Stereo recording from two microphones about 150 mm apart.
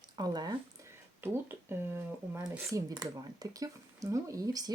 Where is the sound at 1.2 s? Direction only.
15° right (ahead or behind).